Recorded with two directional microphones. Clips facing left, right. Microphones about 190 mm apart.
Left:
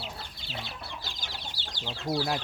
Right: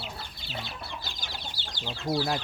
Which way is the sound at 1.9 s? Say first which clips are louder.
Right 1 dB; 5° right (ahead or behind).